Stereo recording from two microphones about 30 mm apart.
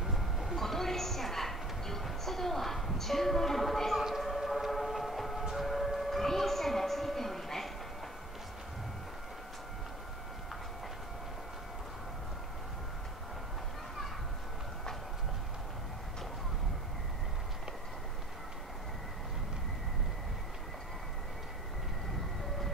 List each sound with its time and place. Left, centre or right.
0.0 s train: centre
0.6 s speech: centre
4.4 s vehicle: centre
5.5 s a sound: centre